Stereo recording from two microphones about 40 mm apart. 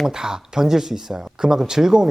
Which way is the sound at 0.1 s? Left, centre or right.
Centre.